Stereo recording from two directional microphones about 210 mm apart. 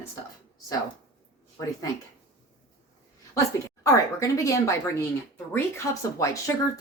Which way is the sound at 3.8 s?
15° left (ahead or behind).